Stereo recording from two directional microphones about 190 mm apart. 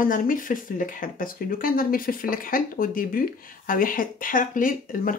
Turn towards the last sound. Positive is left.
turn(degrees=45)  # may be behind; listen again after turning